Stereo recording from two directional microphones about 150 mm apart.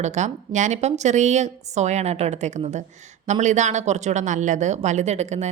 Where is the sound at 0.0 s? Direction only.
50° right (ahead or behind).